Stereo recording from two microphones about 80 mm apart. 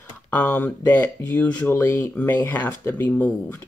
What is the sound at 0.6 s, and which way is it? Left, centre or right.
Speech, left.